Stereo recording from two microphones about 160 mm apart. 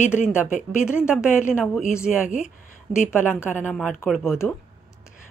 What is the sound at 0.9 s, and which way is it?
Speech, 5° right (ahead or behind).